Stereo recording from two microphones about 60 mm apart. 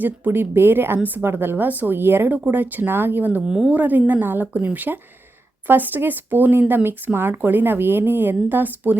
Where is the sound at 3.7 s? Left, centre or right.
Right.